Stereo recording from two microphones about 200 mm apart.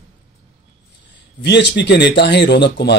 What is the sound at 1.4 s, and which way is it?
Speech, 60° left (ahead or behind).